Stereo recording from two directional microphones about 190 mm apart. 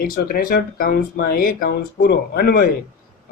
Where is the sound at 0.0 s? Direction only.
50° left (ahead or behind).